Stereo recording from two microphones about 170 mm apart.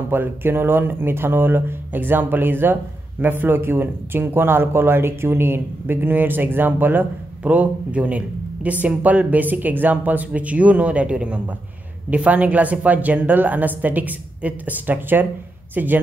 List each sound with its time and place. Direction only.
0.1 s speech: 10° right (ahead or behind)